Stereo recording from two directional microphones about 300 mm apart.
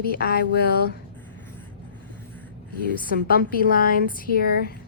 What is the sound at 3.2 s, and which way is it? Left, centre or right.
A woman's voice, left.